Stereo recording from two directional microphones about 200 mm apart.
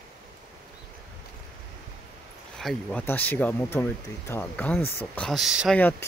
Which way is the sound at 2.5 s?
Centre (ahead or behind).